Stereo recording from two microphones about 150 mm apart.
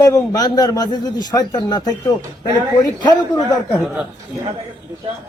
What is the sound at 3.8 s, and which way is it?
Speech, 10° right (ahead or behind).